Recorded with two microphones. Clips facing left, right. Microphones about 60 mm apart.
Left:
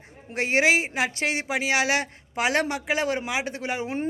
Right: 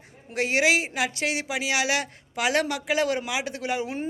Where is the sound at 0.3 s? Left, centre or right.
Left.